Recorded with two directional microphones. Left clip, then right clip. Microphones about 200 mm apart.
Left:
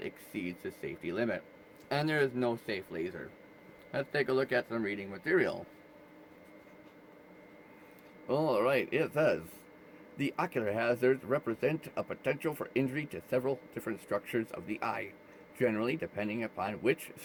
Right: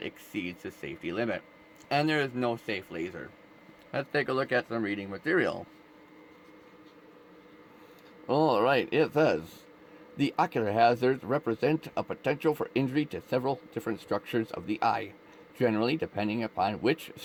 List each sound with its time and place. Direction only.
0.0 s speech: 20° right (ahead or behind)
8.3 s speech: 35° right (ahead or behind)